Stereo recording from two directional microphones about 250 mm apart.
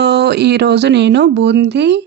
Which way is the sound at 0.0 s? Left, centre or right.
Right.